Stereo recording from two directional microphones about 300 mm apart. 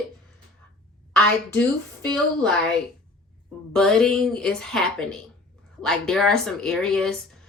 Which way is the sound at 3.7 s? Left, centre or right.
Centre.